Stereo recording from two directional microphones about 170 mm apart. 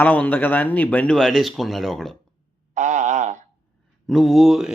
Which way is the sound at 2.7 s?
45° right (ahead or behind).